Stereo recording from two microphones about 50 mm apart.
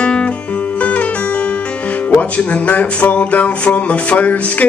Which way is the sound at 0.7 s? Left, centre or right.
Left.